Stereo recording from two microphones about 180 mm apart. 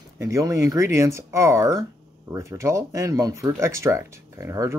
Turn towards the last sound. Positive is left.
turn(degrees=-15)  # may be behind; listen again after turning